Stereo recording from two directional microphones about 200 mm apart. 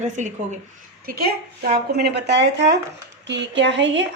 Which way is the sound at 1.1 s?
50° right (ahead or behind).